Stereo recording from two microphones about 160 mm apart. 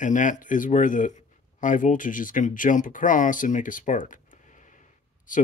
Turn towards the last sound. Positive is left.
turn(degrees=50)  # may be behind; listen again after turning